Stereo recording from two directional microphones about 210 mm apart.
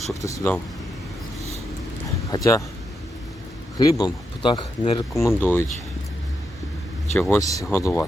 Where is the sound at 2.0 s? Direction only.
15° left (ahead or behind).